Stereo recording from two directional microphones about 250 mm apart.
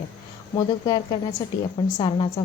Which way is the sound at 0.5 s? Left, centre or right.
Centre.